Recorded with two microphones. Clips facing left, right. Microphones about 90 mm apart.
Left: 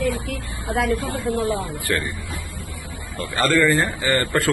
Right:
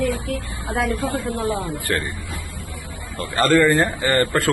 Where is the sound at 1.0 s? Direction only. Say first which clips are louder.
Even; 40° right (ahead or behind).